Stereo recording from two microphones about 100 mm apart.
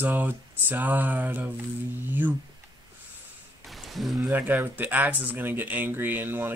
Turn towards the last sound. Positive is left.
turn(degrees=-20)  # may be behind; listen again after turning